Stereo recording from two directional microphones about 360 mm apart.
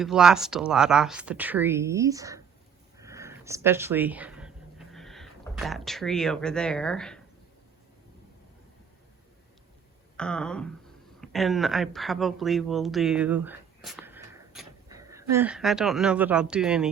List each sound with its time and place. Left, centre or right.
0.0 s speech: centre
3.0 s a sound: centre
10.2 s speech: centre